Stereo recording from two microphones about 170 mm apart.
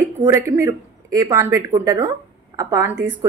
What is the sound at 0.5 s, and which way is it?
A woman's voice, 15° right (ahead or behind).